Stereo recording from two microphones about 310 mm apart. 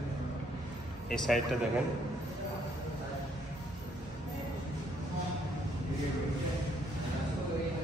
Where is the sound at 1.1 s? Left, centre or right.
Centre.